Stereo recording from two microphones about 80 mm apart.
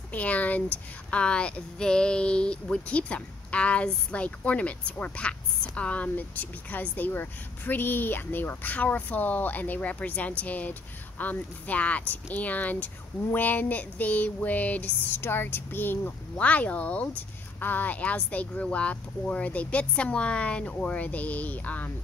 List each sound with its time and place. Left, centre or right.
0.1 s speech: centre